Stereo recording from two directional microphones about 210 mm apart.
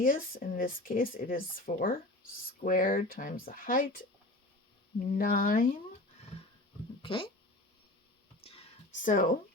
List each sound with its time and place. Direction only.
0.0 s speech: 40° left (ahead or behind)
5.1 s speech: 40° left (ahead or behind)
7.0 s cat: 25° left (ahead or behind)
8.4 s a sound: 35° left (ahead or behind)